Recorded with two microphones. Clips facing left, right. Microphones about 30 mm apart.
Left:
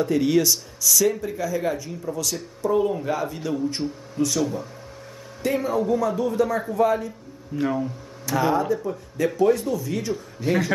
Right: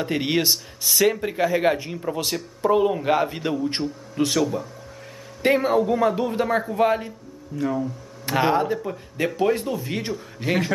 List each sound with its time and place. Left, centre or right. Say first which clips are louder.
0.0 s a man's voice: left 2 dB; right
4.4 s speech: right 2 dB; centre
5.4 s a man's voice: right 4 dB; right
7.5 s speech: left 1 dB; centre
8.3 s a man's voice: right 1 dB; right